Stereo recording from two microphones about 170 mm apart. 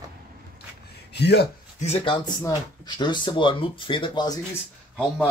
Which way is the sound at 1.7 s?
40° left (ahead or behind).